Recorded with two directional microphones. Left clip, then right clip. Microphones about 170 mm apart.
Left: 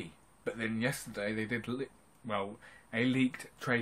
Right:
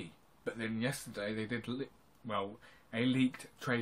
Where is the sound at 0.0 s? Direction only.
15° left (ahead or behind).